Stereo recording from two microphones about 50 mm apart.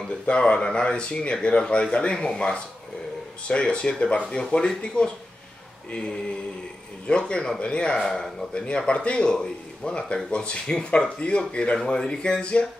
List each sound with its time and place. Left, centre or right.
0.3 s speech: left